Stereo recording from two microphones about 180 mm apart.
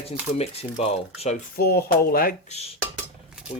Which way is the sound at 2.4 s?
35° left (ahead or behind).